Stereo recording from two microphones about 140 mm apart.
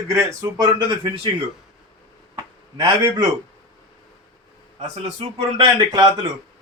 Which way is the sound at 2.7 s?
30° right (ahead or behind).